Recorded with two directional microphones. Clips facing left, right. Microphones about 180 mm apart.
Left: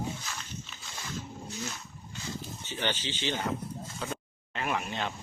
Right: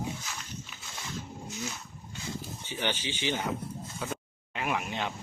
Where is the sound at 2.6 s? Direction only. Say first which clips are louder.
Even; 10° right (ahead or behind).